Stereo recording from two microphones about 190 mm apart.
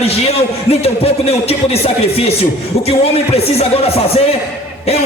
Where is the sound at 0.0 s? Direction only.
30° left (ahead or behind).